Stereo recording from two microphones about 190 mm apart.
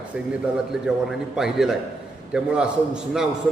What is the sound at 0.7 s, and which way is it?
A man's voice, 5° right (ahead or behind).